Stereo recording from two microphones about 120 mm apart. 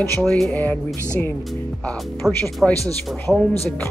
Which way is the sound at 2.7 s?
30° right (ahead or behind).